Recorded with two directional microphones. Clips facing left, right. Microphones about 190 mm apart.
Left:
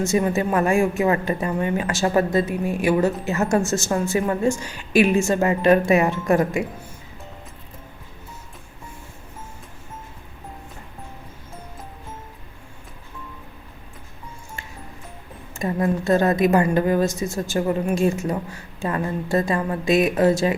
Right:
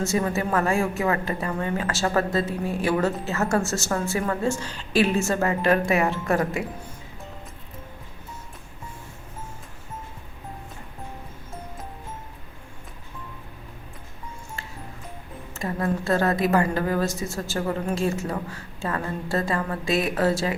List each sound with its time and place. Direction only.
0.0 s a woman's voice: 20° left (ahead or behind)
15.5 s a woman's voice: 20° left (ahead or behind)